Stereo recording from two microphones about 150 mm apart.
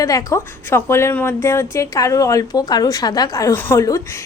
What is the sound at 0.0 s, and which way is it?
A woman's voice, 25° left (ahead or behind).